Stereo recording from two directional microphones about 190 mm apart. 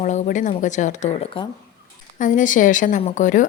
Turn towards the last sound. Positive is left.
turn(degrees=40)  # may be behind; listen again after turning